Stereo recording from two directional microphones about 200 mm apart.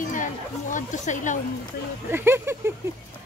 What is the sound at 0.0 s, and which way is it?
Speech, 40° left (ahead or behind).